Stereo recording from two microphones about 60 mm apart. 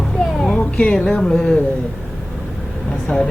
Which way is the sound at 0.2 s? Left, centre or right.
Centre.